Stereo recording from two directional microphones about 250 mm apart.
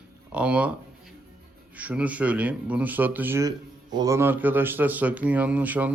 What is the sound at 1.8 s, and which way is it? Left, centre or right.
A man's voice, centre.